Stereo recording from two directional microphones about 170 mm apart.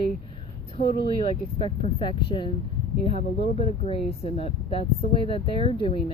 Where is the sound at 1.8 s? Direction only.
30° left (ahead or behind).